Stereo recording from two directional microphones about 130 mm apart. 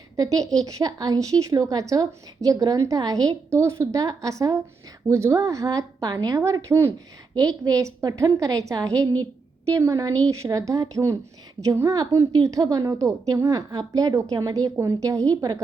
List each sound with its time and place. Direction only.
0.2 s a woman's voice: 25° right (ahead or behind)